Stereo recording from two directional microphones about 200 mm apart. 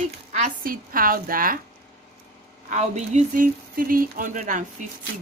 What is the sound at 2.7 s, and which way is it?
A woman's voice, 35° right (ahead or behind).